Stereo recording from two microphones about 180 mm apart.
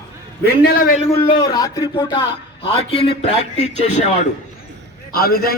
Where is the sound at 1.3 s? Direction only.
25° left (ahead or behind).